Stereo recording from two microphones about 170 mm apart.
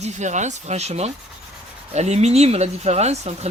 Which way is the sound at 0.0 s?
45° right (ahead or behind).